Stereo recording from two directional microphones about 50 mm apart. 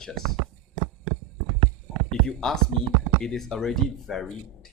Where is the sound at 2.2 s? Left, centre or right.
Centre.